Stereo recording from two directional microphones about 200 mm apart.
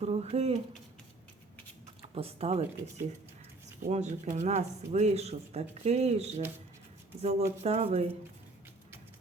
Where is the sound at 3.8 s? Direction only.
35° right (ahead or behind).